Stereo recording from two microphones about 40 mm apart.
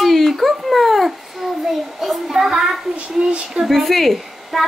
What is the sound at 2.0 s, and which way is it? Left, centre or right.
Speech, centre.